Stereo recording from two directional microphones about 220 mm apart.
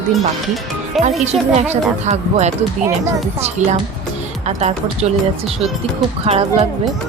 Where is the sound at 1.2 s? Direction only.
30° right (ahead or behind).